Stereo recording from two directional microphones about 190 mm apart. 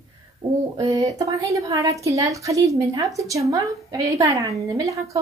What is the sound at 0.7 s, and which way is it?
Speech, 20° right (ahead or behind).